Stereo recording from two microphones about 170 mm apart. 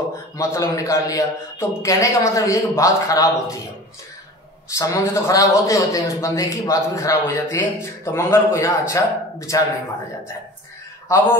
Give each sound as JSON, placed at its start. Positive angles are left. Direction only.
{"t": 0.4, "sound": "a man's voice", "side_deg": 15}
{"t": 4.6, "sound": "speech", "side_deg": 20}
{"t": 11.1, "sound": "speech", "side_deg": 15}